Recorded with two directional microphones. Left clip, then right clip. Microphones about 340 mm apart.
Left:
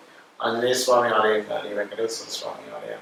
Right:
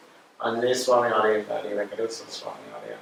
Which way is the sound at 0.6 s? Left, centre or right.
Centre.